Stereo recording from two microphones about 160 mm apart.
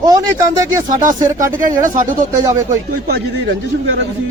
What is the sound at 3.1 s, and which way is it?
Speech, 75° right (ahead or behind).